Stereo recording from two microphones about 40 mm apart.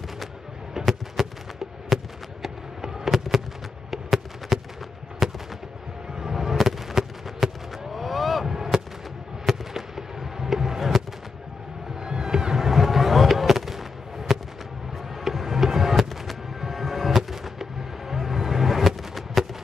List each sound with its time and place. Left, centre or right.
0.8 s a sound: centre
2.4 s fireworks: centre
3.9 s a sound: centre
5.2 s fireworks: centre
8.7 s fireworks: centre
12.0 s fireworks: centre
15.2 s music: centre